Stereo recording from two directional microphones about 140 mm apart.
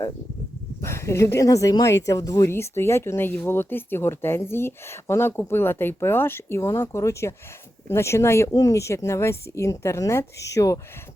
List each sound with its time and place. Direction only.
0.8 s speech: 20° left (ahead or behind)